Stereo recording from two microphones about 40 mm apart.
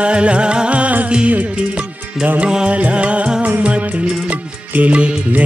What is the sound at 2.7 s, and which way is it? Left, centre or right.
Music, right.